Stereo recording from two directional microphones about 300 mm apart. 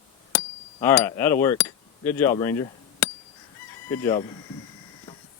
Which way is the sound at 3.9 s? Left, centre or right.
Centre.